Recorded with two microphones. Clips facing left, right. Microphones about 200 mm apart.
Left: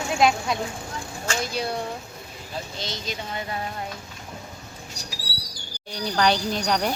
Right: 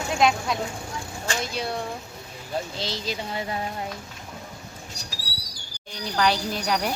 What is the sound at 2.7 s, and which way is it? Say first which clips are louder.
Speech: right 2 dB; 30° right (ahead or behind).